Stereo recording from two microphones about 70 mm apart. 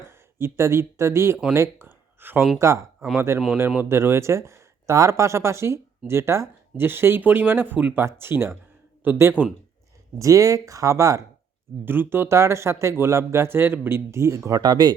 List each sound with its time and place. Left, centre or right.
0.0 s speech: right
1.5 s a sound: right
2.6 s speech: right
7.9 s speech: right
10.2 s speech: right
11.9 s speech: right
14.6 s speech: right